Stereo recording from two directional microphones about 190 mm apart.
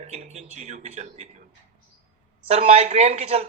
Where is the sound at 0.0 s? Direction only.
35° right (ahead or behind).